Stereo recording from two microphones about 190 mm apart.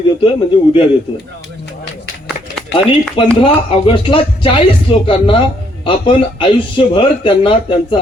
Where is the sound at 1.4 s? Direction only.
65° left (ahead or behind).